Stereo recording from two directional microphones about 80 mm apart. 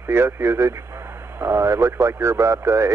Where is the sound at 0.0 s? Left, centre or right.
Right.